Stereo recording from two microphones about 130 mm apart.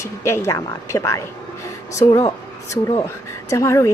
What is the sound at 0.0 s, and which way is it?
Speech, 20° left (ahead or behind).